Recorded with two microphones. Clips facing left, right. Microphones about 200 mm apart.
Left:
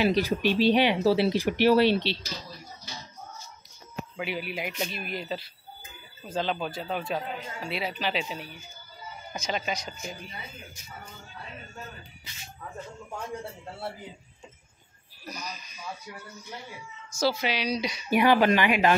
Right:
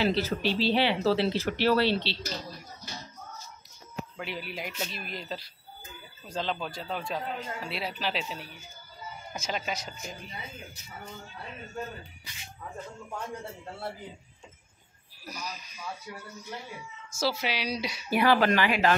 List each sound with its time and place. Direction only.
0.0 s speech: 15° left (ahead or behind)
4.5 s speech: 5° left (ahead or behind)
15.2 s speech: 5° right (ahead or behind)
17.2 s speech: 5° right (ahead or behind)
18.1 s speech: 15° left (ahead or behind)